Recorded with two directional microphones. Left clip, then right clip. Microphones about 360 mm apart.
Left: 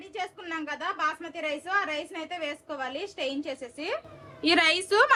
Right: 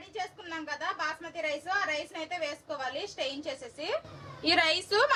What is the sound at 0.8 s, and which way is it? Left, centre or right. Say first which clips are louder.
Speech: left 4 dB; centre.